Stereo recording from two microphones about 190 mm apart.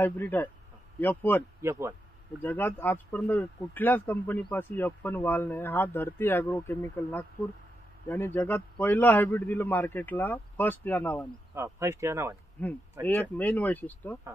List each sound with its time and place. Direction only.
0.0 s speech: 10° left (ahead or behind)
1.6 s a sound: 15° right (ahead or behind)
2.4 s speech: 10° left (ahead or behind)
11.5 s speech: 15° right (ahead or behind)
12.6 s speech: 10° left (ahead or behind)